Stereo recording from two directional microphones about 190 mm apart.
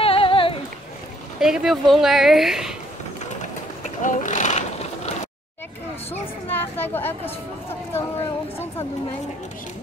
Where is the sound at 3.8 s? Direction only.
40° left (ahead or behind).